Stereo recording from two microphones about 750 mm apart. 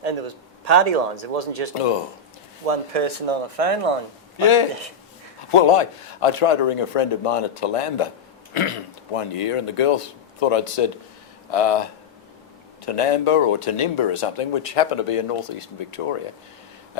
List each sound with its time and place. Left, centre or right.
0.0 s speech: right
4.4 s a man's voice: left